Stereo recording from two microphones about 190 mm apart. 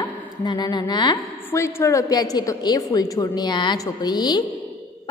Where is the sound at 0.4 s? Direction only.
20° left (ahead or behind).